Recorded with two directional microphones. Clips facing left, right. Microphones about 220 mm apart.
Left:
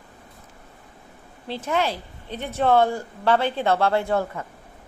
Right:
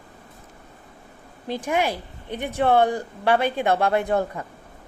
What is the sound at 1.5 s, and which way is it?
A woman's voice, 15° right (ahead or behind).